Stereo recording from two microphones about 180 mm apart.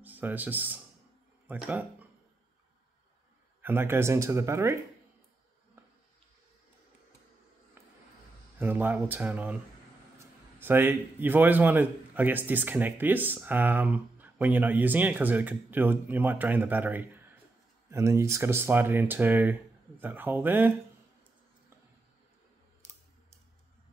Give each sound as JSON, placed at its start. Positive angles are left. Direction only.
{"t": 0.0, "sound": "a man's voice", "side_deg": -10}
{"t": 3.6, "sound": "a man's voice", "side_deg": -10}
{"t": 5.8, "sound": "a sound", "side_deg": -10}
{"t": 8.5, "sound": "a man's voice", "side_deg": -10}